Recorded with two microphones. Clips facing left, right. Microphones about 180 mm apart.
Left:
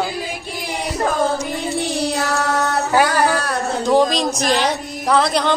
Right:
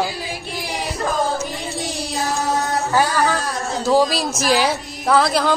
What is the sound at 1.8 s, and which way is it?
Child singing, 65° left (ahead or behind).